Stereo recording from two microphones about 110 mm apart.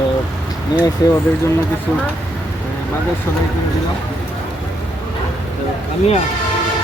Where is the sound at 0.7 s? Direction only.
35° left (ahead or behind).